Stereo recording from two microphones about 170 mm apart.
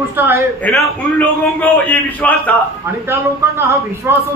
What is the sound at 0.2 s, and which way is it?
Speech, 10° right (ahead or behind).